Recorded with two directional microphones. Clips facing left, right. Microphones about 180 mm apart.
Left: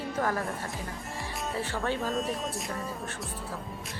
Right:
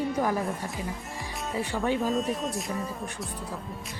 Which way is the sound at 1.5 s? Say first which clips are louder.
Right 4 dB; 15° right (ahead or behind).